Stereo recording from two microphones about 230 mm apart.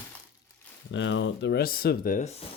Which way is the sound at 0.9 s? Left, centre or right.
Left.